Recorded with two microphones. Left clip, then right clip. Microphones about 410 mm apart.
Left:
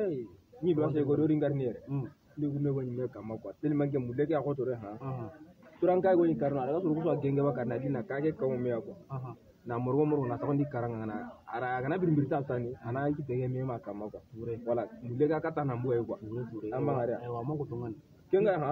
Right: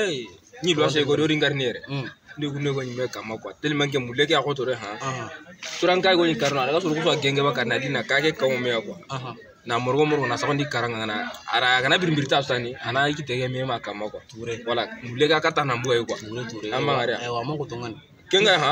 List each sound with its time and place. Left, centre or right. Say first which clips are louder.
0.7 s speech: right 8 dB; left
1.2 s a man's voice: right 8 dB; left
5.9 s speech: right 7 dB; left